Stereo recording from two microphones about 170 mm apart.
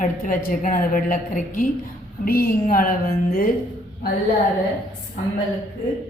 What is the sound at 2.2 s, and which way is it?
A woman's voice, 60° left (ahead or behind).